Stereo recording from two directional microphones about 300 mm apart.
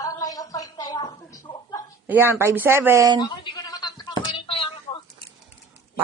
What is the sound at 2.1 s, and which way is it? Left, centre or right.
Speech, centre.